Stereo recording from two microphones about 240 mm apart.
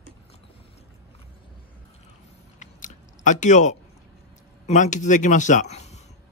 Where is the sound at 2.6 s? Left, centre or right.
Left.